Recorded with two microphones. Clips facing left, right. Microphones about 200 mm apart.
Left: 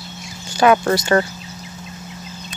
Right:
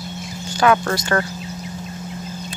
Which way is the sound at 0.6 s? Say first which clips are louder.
Left 3 dB; 20° left (ahead or behind).